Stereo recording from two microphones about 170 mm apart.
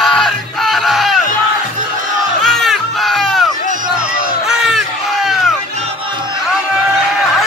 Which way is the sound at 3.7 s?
55° right (ahead or behind).